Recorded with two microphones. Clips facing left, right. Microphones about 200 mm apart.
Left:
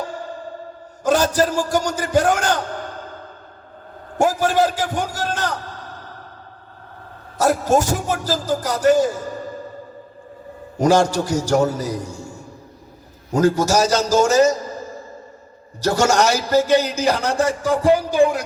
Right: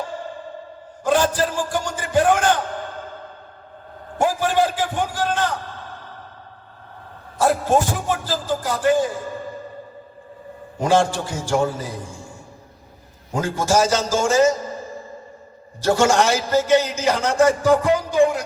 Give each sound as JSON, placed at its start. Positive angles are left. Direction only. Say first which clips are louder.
{"t": 1.0, "sound": "a man's voice", "louder": "left 2 dB", "side_deg": 45}
{"t": 2.7, "sound": "sigh", "louder": "even", "side_deg": 40}
{"t": 4.2, "sound": "a man's voice", "louder": "left 2 dB", "side_deg": 45}
{"t": 7.3, "sound": "a man's voice", "louder": "left 1 dB", "side_deg": 45}
{"t": 10.8, "sound": "a man's voice", "louder": "left 3 dB", "side_deg": 40}
{"t": 13.3, "sound": "a man's voice", "louder": "left 4 dB", "side_deg": 40}
{"t": 15.8, "sound": "a man's voice", "louder": "even", "side_deg": 40}